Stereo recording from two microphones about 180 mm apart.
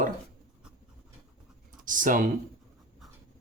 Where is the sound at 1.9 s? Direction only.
45° right (ahead or behind).